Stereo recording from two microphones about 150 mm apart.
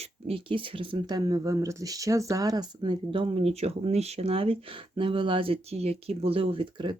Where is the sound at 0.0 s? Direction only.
40° right (ahead or behind).